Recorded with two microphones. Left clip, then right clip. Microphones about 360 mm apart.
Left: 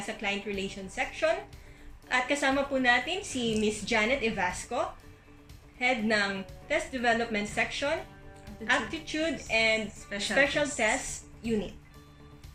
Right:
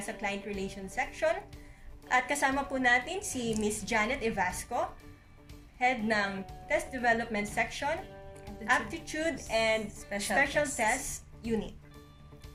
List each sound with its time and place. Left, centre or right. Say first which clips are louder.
0.2 s a woman's voice: left 3 dB; centre
5.8 s a woman's voice: left 2 dB; centre